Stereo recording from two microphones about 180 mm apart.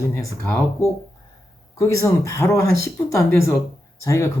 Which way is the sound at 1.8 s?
15° left (ahead or behind).